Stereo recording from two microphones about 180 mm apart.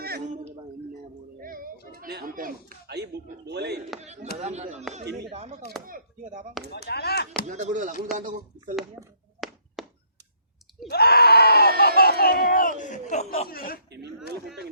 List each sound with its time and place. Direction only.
1.4 s a sound: 50° right (ahead or behind)
3.4 s speech: 65° right (ahead or behind)
4.0 s chop: 40° right (ahead or behind)
4.4 s speech: 40° right (ahead or behind)
6.7 s speech: 65° left (ahead or behind)
7.4 s speech: 45° right (ahead or behind)
9.0 s speech: 5° right (ahead or behind)
9.4 s thunk: centre (ahead or behind)
9.8 s a sound: centre (ahead or behind)
10.8 s a man's voice: 60° left (ahead or behind); by 13.5 s 35° left (ahead or behind)
13.5 s a man's voice: 55° left (ahead or behind)